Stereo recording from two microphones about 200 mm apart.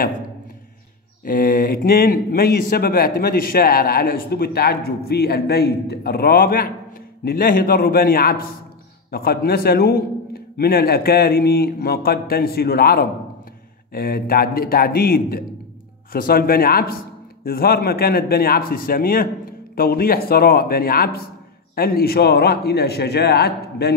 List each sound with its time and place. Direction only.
1.2 s speech: 45° left (ahead or behind)